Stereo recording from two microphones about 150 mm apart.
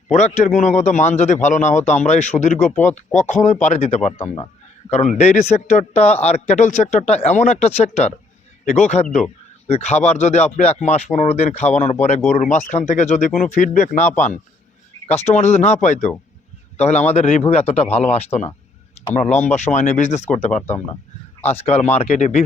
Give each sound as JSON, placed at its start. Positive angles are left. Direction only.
{"t": 0.1, "sound": "a man's voice", "side_deg": 50}
{"t": 15.0, "sound": "a man's voice", "side_deg": 45}
{"t": 21.4, "sound": "a man's voice", "side_deg": 40}